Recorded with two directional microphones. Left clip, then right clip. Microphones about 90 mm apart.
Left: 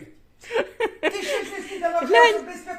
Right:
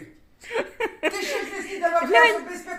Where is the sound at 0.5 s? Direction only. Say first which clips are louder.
Left 3 dB; 20° left (ahead or behind).